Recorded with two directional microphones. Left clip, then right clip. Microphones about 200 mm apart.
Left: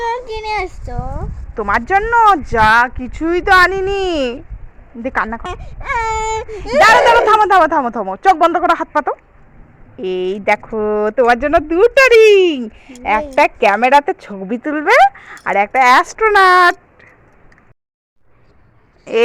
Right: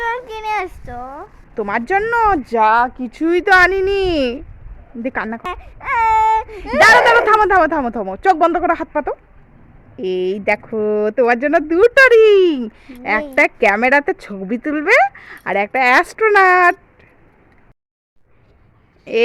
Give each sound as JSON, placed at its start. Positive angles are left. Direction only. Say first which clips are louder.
{"t": 0.0, "sound": "child singing", "louder": "left 1 dB", "side_deg": -20}
{"t": 1.5, "sound": "speech", "louder": "left 3 dB", "side_deg": -10}
{"t": 2.7, "sound": "speech", "louder": "left 3 dB", "side_deg": 15}
{"t": 3.2, "sound": "speech", "louder": "left 1 dB", "side_deg": -20}